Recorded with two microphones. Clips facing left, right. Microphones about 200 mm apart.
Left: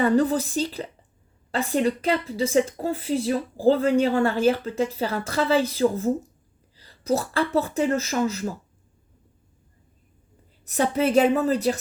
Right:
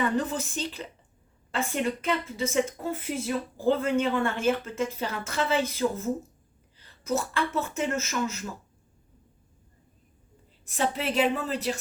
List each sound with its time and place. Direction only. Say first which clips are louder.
0.0 s a woman's voice: left 7 dB; 35° left (ahead or behind)
10.7 s a woman's voice: left 7 dB; 45° left (ahead or behind)